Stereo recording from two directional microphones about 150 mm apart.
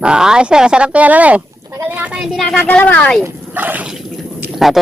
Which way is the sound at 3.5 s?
10° right (ahead or behind).